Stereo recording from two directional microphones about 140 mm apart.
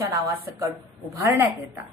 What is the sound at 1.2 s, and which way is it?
Speech, 20° right (ahead or behind).